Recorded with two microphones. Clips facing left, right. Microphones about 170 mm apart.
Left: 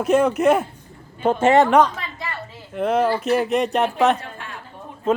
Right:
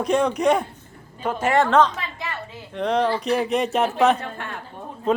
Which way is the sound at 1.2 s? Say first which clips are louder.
Left 5 dB; 25° left (ahead or behind).